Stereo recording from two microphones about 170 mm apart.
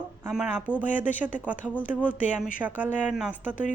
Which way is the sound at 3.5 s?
50° left (ahead or behind).